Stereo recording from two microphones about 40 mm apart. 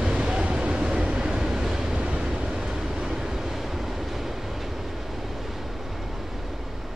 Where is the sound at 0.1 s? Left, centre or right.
Right; by 6.7 s centre.